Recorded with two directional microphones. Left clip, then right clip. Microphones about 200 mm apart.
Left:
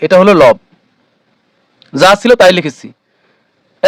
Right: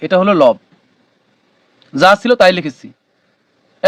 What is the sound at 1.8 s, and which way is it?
Speech, 45° left (ahead or behind).